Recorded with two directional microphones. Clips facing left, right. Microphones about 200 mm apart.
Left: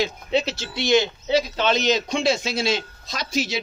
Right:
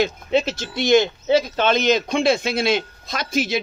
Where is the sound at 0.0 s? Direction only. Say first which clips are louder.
Right 3 dB; 50° right (ahead or behind).